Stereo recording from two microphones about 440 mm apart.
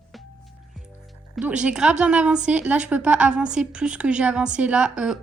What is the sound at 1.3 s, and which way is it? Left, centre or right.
A woman's voice, centre.